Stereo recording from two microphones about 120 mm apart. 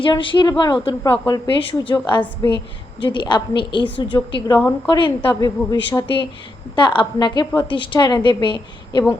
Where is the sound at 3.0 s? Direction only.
45° left (ahead or behind).